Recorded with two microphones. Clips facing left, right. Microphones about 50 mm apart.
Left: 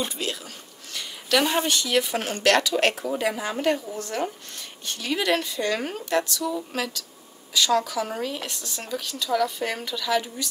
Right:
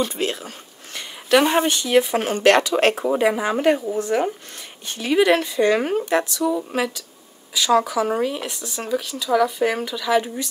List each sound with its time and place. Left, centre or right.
0.1 s speech: right